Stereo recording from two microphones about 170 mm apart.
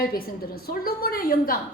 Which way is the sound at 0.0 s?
60° left (ahead or behind).